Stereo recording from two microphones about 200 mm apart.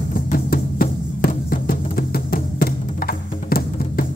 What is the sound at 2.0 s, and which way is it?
Music, 50° left (ahead or behind).